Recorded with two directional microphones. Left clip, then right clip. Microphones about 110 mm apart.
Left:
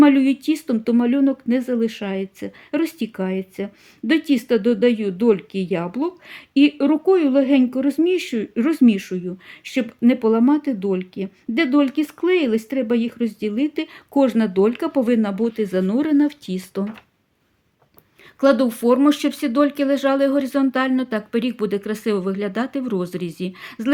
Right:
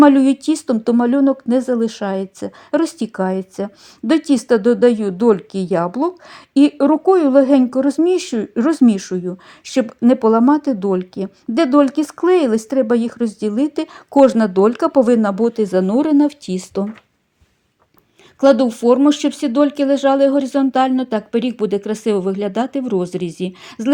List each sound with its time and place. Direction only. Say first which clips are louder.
0.0 s speech: right 4 dB; 30° right (ahead or behind)
18.3 s speech: right 4 dB; 10° right (ahead or behind)